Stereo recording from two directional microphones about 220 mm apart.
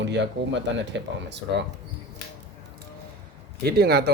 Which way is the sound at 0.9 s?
50° right (ahead or behind).